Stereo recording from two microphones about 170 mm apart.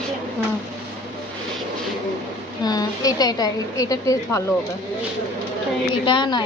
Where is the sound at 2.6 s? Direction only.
20° left (ahead or behind).